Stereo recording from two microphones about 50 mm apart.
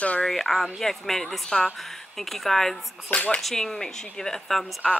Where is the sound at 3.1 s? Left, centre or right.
Left.